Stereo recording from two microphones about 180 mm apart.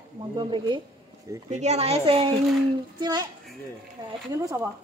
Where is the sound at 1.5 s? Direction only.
40° right (ahead or behind); by 3.3 s 25° right (ahead or behind).